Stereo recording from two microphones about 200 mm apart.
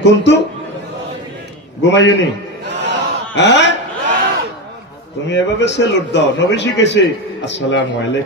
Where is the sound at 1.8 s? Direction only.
60° left (ahead or behind).